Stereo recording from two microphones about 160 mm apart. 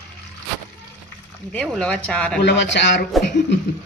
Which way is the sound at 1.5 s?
5° left (ahead or behind).